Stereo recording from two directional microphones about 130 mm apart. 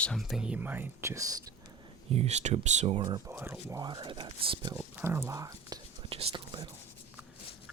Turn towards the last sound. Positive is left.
turn(degrees=-40)  # may be behind; listen again after turning